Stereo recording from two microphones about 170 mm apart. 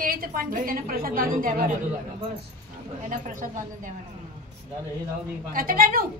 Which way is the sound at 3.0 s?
50° right (ahead or behind).